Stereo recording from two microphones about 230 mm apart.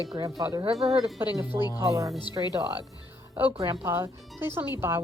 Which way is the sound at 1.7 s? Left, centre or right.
Centre.